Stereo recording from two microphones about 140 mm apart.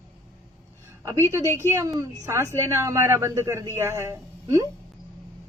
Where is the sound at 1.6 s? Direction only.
20° right (ahead or behind).